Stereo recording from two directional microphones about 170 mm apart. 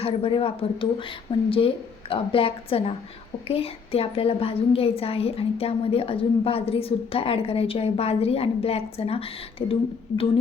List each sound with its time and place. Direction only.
0.0 s a woman's voice: 35° left (ahead or behind)